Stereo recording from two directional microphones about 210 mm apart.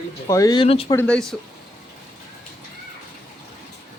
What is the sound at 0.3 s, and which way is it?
Speech, 15° left (ahead or behind).